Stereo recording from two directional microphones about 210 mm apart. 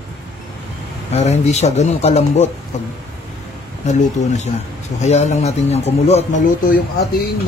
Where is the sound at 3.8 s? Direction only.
35° left (ahead or behind).